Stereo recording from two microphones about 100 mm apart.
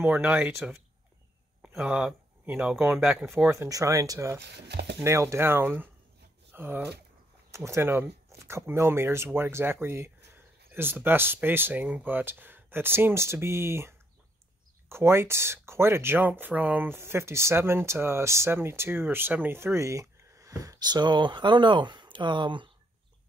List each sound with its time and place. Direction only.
0.0 s speech: 15° right (ahead or behind)
1.8 s speech: 10° right (ahead or behind)
3.4 s speech: 30° right (ahead or behind); by 22.7 s 55° right (ahead or behind)